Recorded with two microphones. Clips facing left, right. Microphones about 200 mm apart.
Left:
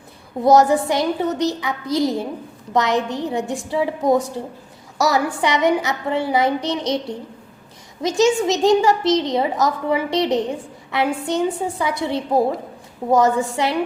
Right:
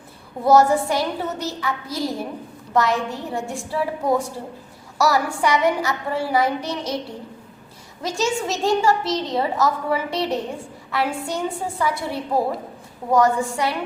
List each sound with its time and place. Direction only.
0.4 s a woman's voice: 15° left (ahead or behind)
8.0 s a woman's voice: 20° left (ahead or behind)